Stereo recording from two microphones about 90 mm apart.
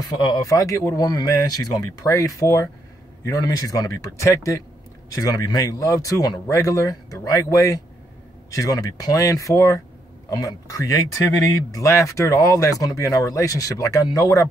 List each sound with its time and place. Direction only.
0.0 s speech: 55° left (ahead or behind)
0.4 s speech: 40° left (ahead or behind)